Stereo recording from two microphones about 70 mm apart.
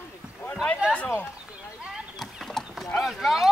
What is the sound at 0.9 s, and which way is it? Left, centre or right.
Speech, centre.